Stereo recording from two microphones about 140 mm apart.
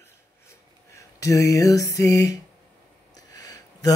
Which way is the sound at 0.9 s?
25° left (ahead or behind).